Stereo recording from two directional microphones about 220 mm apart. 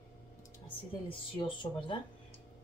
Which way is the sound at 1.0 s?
25° left (ahead or behind).